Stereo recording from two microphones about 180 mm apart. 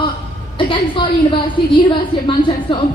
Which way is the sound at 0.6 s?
25° left (ahead or behind).